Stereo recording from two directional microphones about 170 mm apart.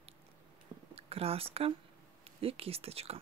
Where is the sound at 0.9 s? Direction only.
35° right (ahead or behind).